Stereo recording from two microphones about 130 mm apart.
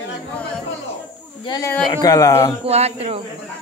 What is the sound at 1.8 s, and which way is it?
Speech, 30° left (ahead or behind).